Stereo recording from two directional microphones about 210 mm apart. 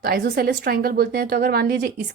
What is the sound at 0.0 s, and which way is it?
A woman's voice, 50° right (ahead or behind).